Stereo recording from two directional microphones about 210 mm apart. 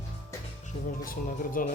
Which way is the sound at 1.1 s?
40° left (ahead or behind).